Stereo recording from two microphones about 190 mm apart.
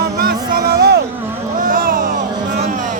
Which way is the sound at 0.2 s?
50° right (ahead or behind).